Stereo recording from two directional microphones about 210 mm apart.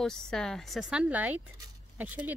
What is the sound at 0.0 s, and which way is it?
Speech, centre (ahead or behind).